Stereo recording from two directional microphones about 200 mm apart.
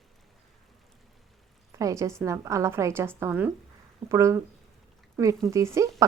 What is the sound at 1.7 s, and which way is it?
A woman's voice, 15° right (ahead or behind).